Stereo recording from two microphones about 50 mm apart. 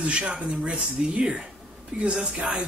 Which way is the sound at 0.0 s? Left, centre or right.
Right.